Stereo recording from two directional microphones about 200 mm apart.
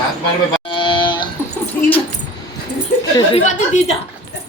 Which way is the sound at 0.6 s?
25° left (ahead or behind).